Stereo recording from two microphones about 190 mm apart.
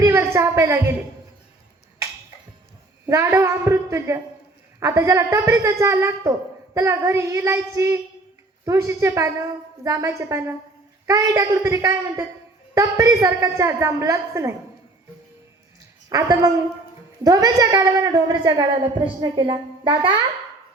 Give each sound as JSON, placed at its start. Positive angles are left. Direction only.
{"t": 0.0, "sound": "a woman's voice", "side_deg": -15}
{"t": 3.1, "sound": "a woman's voice", "side_deg": -15}
{"t": 16.0, "sound": "a woman's voice", "side_deg": -20}